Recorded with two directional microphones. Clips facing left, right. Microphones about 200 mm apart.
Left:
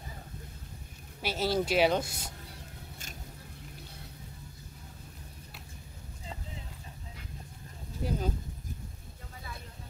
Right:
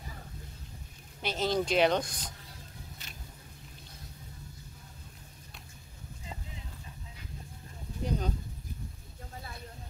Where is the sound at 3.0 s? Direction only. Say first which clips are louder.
Left 3 dB; 45° left (ahead or behind).